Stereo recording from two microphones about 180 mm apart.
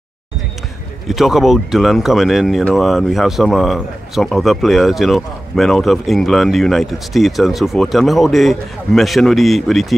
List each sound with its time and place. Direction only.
1.0 s speech: centre (ahead or behind)